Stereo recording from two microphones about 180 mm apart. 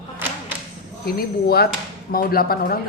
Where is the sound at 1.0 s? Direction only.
60° left (ahead or behind).